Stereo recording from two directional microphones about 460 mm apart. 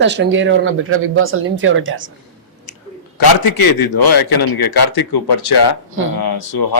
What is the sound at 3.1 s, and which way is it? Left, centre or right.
A man's voice, left.